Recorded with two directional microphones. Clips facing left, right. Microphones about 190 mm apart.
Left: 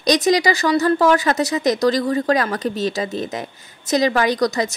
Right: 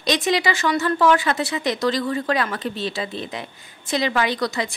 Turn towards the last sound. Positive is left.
turn(degrees=40)  # may be behind; listen again after turning